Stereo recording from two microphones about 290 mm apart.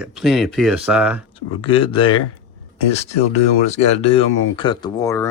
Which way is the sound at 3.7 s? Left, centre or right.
Left.